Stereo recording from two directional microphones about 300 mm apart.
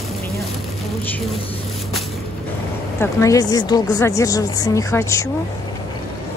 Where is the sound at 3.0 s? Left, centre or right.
Centre.